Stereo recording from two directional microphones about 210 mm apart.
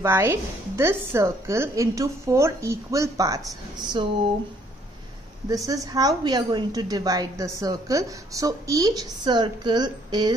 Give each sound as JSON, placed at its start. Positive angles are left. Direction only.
{"t": 0.0, "sound": "a woman's voice", "side_deg": -10}
{"t": 5.5, "sound": "a woman's voice", "side_deg": -15}